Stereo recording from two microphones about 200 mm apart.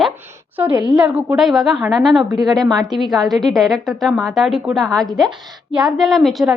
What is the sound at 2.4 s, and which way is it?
Speech, 20° right (ahead or behind).